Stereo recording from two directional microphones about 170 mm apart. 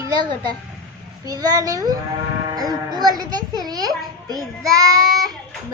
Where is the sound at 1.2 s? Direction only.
20° right (ahead or behind).